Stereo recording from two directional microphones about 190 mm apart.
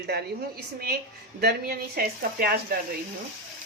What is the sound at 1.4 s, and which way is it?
Speech, 55° right (ahead or behind).